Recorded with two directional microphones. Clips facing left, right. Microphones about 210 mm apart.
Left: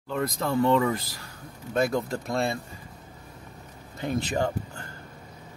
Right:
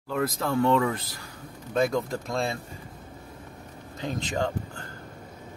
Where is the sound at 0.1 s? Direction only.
Centre (ahead or behind).